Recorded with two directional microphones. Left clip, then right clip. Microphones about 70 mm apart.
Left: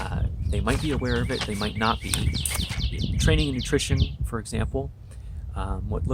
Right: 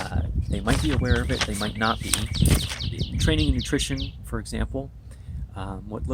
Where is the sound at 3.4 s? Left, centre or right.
Left.